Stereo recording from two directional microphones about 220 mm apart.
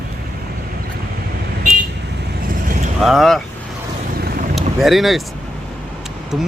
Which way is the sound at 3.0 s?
Centre (ahead or behind).